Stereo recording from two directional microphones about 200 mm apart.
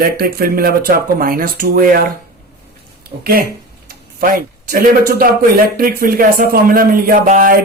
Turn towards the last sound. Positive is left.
turn(degrees=-45)  # may be behind; listen again after turning